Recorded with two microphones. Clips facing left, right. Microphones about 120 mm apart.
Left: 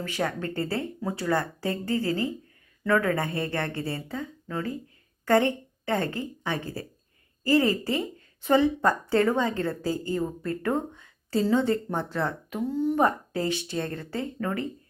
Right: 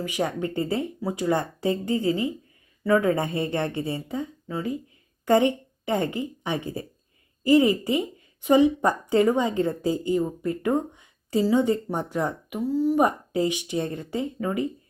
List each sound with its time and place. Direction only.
0.0 s a woman's voice: 15° right (ahead or behind)
12.6 s speech: 5° right (ahead or behind)
13.0 s speech: 15° right (ahead or behind)